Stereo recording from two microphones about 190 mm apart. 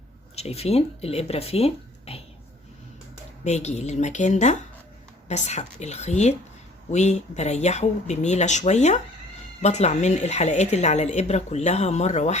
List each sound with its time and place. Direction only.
0.3 s speech: 35° left (ahead or behind)
3.4 s a woman's voice: 35° left (ahead or behind)